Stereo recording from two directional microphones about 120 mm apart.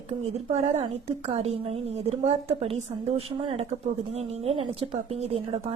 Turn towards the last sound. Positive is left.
turn(degrees=-60)  # may be behind; listen again after turning